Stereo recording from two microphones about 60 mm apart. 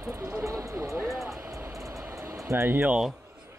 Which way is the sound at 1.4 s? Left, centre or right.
Right.